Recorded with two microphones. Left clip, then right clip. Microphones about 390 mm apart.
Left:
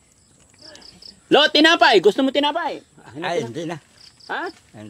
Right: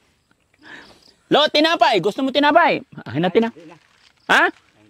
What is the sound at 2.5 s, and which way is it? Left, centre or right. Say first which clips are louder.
Speech: right 11 dB; right.